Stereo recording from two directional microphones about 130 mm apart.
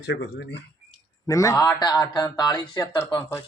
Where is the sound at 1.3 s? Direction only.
25° left (ahead or behind).